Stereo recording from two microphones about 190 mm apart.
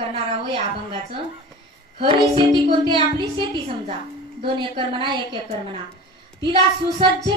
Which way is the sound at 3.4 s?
25° right (ahead or behind).